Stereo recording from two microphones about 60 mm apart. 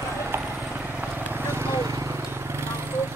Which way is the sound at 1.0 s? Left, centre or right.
Right.